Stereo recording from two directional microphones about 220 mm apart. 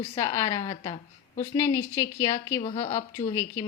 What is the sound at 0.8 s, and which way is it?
Speech, 30° left (ahead or behind).